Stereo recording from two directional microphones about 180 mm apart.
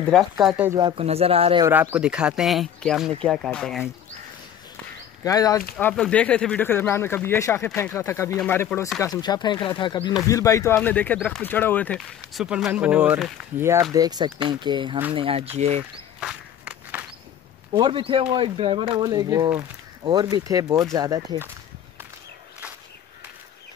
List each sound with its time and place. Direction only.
0.1 s speech: centre (ahead or behind)
0.7 s speech: 25° right (ahead or behind)
1.7 s speech: 10° right (ahead or behind)
5.2 s speech: 20° left (ahead or behind)
5.8 s speech: 5° left (ahead or behind); by 15.8 s 35° right (ahead or behind)
16.2 s walk: 5° right (ahead or behind)
17.7 s speech: 25° right (ahead or behind)